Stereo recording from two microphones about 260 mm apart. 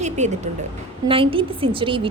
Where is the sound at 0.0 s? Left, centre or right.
Right.